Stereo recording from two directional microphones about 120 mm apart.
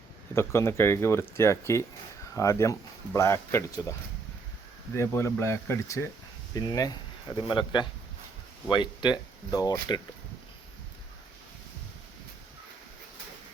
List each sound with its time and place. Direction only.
0.3 s speech: 20° left (ahead or behind)
4.9 s speech: 25° left (ahead or behind)